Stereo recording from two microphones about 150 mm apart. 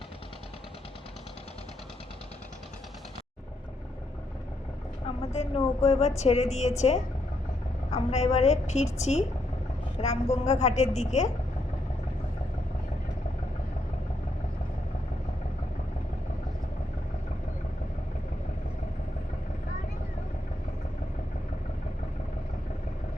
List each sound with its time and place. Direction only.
5.0 s a woman's voice: 40° left (ahead or behind)
8.1 s a woman's voice: 45° left (ahead or behind)